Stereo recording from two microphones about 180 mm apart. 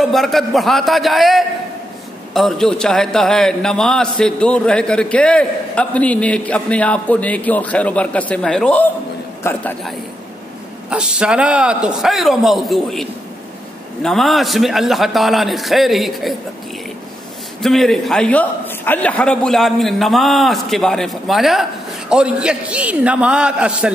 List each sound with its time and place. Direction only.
0.0 s a man's voice: centre (ahead or behind)
10.9 s a man's voice: 5° right (ahead or behind)
17.6 s a man's voice: centre (ahead or behind)